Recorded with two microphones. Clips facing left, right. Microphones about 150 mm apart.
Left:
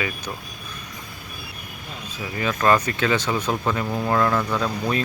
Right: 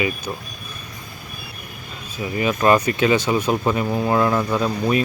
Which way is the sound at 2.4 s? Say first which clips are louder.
Right 3 dB; 15° right (ahead or behind).